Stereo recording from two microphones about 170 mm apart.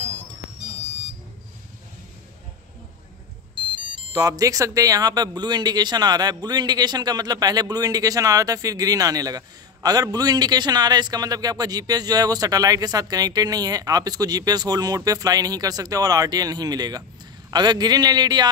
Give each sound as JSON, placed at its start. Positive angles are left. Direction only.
{"t": 3.5, "sound": "speech", "side_deg": -30}